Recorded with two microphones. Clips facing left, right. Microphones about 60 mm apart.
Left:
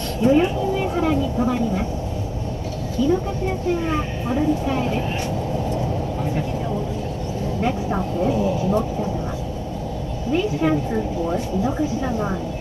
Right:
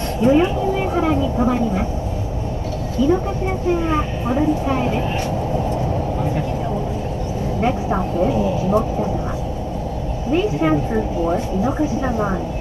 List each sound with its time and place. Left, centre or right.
0.2 s speech: right
3.0 s speech: right
7.6 s speech: right
10.3 s speech: right